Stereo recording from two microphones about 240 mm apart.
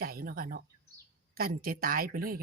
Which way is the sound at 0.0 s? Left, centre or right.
Right.